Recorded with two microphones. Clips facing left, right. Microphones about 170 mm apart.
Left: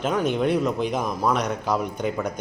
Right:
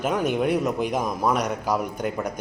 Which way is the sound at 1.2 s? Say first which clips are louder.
Even; 5° right (ahead or behind).